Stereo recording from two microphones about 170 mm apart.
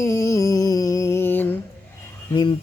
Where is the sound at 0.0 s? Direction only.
15° left (ahead or behind).